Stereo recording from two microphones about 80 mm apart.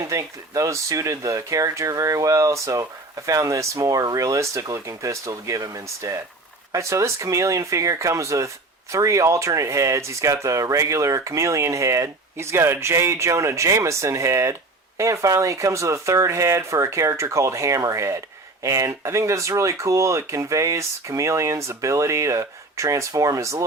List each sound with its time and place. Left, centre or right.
0.1 s speech: right